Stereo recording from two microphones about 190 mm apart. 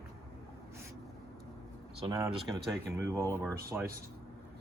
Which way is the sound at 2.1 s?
20° right (ahead or behind).